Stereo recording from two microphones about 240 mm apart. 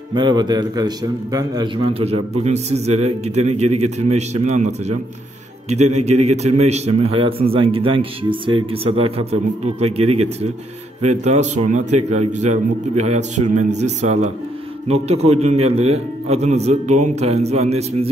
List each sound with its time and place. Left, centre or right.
0.1 s a man's voice: centre